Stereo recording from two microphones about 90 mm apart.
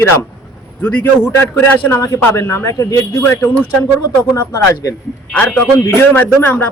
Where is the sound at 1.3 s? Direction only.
25° left (ahead or behind).